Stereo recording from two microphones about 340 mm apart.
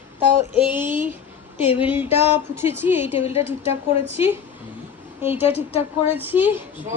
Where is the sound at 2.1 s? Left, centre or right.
Centre.